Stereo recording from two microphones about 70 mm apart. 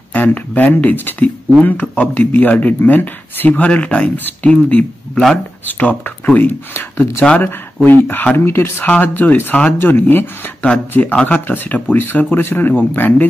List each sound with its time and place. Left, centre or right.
0.1 s speech: left